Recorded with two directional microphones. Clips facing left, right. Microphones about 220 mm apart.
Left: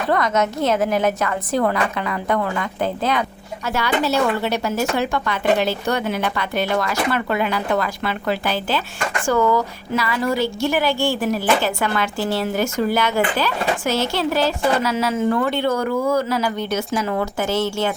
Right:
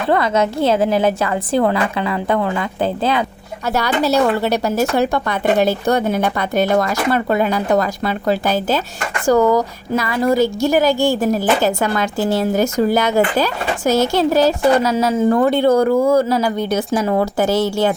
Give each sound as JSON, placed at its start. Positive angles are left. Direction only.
{"t": 0.1, "sound": "a woman's voice", "side_deg": -30}
{"t": 16.4, "sound": "speech", "side_deg": -15}
{"t": 16.7, "sound": "speech", "side_deg": -30}